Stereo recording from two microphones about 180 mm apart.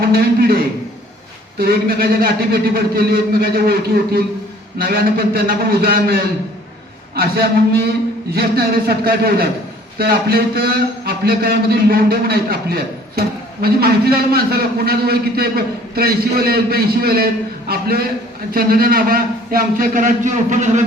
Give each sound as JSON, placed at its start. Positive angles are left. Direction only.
{"t": 1.5, "sound": "a man's voice", "side_deg": -55}
{"t": 7.2, "sound": "a man's voice", "side_deg": -55}